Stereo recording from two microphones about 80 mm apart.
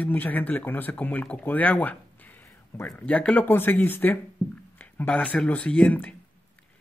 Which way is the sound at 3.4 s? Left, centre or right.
Left.